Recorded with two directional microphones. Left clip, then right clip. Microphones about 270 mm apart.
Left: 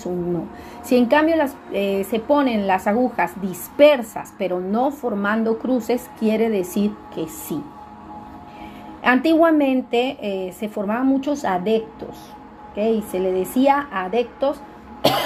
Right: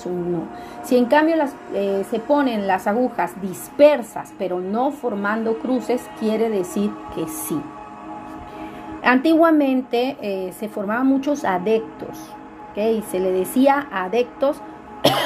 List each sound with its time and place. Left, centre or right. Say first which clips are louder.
0.8 s a woman's voice: even; centre
6.7 s speech: even; right
9.0 s a woman's voice: even; centre
9.8 s speech: left 1 dB; right
10.2 s a woman's voice: even; centre
12.7 s a woman's voice: even; centre
15.0 s cough: right 1 dB; centre